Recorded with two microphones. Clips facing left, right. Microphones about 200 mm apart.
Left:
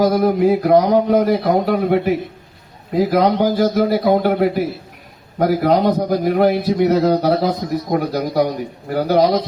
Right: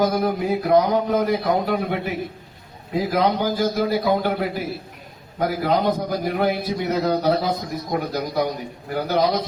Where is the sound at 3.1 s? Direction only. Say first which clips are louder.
Left 4 dB; 45° left (ahead or behind).